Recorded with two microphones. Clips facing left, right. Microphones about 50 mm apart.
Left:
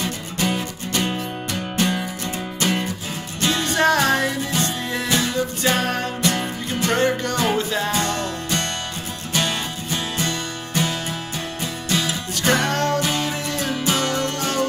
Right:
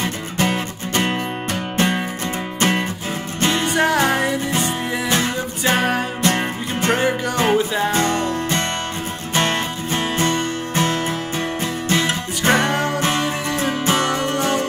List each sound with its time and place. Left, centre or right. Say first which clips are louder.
0.0 s music: right 3 dB; right
3.6 s music: left 1 dB; centre
6.2 s music: right 3 dB; right
6.9 s music: right 1 dB; centre
7.9 s music: right 4 dB; right
12.6 s music: right 1 dB; centre
13.2 s music: right 3 dB; right